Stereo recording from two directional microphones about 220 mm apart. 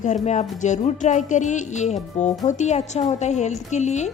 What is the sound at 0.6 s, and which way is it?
A woman's voice, 30° left (ahead or behind).